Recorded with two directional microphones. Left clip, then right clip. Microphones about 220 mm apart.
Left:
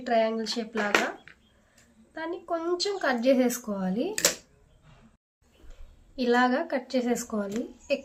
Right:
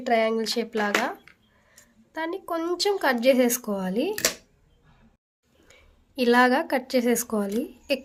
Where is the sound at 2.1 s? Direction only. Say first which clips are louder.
Right 3 dB; 50° right (ahead or behind).